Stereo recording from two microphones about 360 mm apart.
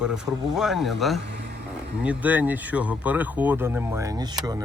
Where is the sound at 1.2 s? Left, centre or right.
Right.